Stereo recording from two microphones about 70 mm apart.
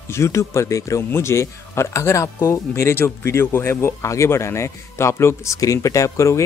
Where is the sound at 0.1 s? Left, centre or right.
Left.